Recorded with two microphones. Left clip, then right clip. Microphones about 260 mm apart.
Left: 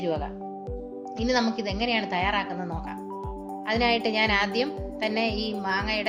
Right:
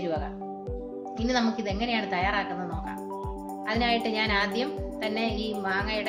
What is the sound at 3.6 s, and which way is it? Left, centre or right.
Speech, left.